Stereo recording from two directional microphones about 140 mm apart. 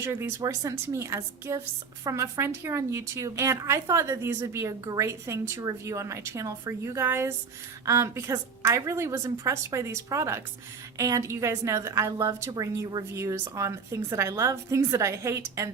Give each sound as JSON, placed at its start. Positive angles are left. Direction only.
{"t": 0.0, "sound": "a woman's voice", "side_deg": -20}